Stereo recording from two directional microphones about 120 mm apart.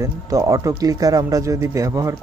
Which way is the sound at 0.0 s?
25° right (ahead or behind).